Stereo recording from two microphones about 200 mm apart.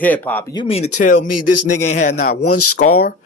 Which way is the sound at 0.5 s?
25° left (ahead or behind).